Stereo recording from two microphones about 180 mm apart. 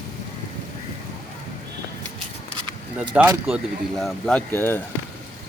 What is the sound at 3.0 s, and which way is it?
Speech, 10° right (ahead or behind).